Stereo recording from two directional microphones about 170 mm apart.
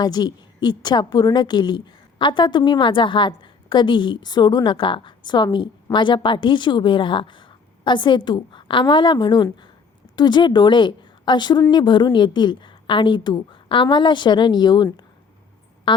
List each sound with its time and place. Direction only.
0.0 s a woman's voice: 25° left (ahead or behind)